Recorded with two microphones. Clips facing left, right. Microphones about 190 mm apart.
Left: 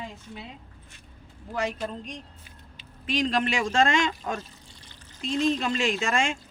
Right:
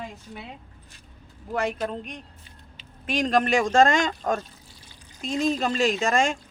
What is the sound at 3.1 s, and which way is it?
Speech, 45° right (ahead or behind).